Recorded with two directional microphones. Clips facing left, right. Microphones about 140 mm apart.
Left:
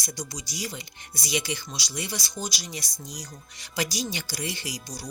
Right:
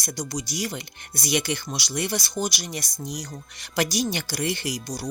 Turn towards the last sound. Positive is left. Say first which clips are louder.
# right 6 dB
turn(degrees=-60)  # may be behind; listen again after turning